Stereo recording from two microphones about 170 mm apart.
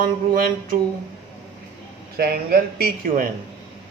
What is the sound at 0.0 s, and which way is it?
Speech, 55° right (ahead or behind).